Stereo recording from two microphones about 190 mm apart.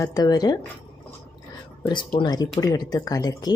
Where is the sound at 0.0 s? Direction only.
20° left (ahead or behind).